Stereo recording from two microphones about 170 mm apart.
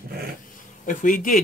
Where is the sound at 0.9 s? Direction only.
50° left (ahead or behind).